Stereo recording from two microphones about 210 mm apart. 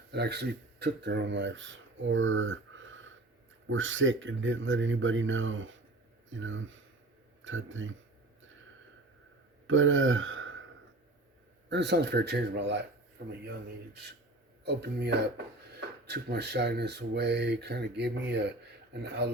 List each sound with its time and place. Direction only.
0.1 s speech: 50° right (ahead or behind)
9.6 s speech: 70° right (ahead or behind)
11.7 s speech: 55° right (ahead or behind)
14.6 s speech: 50° right (ahead or behind)